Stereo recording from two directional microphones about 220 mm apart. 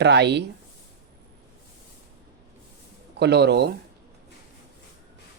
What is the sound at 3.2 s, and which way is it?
Speech, 50° right (ahead or behind).